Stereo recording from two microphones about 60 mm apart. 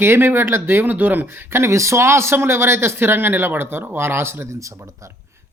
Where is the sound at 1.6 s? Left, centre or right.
Right.